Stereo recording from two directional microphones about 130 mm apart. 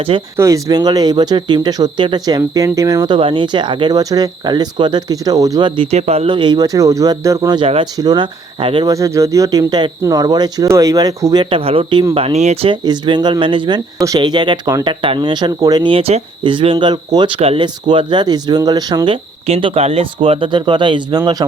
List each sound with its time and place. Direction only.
0.3 s speech: 25° right (ahead or behind)
3.2 s speech: 40° right (ahead or behind)
6.0 s speech: 50° right (ahead or behind)
6.3 s speech: 35° right (ahead or behind)
7.6 s speech: 45° right (ahead or behind)
7.9 s speech: 35° right (ahead or behind)
8.9 s speech: 25° right (ahead or behind)
11.4 s speech: 45° right (ahead or behind)
12.1 s speech: 50° right (ahead or behind)
12.7 s speech: 35° right (ahead or behind)
15.9 s speech: 50° right (ahead or behind); by 21.4 s 30° right (ahead or behind)